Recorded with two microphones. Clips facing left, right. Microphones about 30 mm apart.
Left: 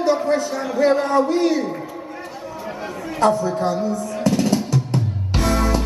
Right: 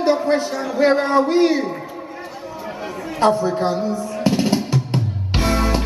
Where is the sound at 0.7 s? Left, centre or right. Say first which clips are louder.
Right 1 dB; right.